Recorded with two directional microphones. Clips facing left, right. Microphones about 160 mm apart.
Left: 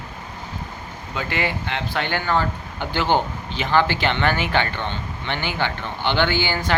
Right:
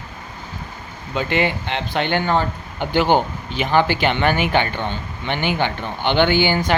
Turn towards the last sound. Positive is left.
turn(degrees=-15)  # may be behind; listen again after turning